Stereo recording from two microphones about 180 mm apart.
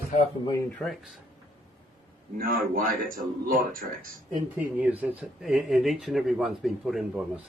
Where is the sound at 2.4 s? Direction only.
50° right (ahead or behind).